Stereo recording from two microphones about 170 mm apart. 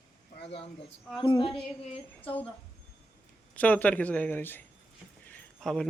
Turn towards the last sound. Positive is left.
turn(degrees=5)  # may be behind; listen again after turning